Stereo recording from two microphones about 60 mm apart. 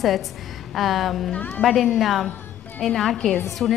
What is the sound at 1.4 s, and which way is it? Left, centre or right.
Speech, left.